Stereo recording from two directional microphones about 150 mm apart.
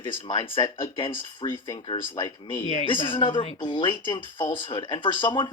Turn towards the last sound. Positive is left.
turn(degrees=30)  # may be behind; listen again after turning